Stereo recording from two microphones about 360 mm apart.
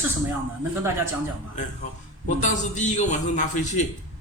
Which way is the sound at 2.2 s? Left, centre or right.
Centre.